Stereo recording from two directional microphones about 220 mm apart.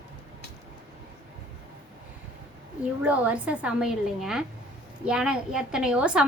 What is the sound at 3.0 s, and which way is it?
A woman's voice, 5° right (ahead or behind).